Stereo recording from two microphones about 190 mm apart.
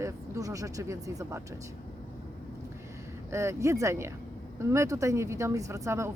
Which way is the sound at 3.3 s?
15° right (ahead or behind).